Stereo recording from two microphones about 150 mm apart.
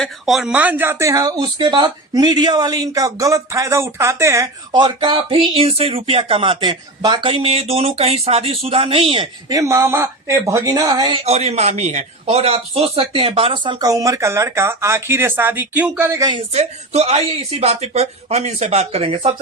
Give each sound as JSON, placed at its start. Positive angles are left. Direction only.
{"t": 0.0, "sound": "speech", "side_deg": 0}
{"t": 9.5, "sound": "speech", "side_deg": -20}
{"t": 11.3, "sound": "speech", "side_deg": -45}
{"t": 16.6, "sound": "speech", "side_deg": -45}